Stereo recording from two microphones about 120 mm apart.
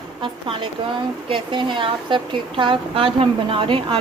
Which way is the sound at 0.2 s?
45° right (ahead or behind).